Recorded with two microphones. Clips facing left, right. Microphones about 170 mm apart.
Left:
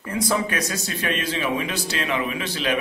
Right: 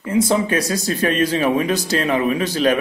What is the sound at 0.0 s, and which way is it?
A man's voice, 25° right (ahead or behind).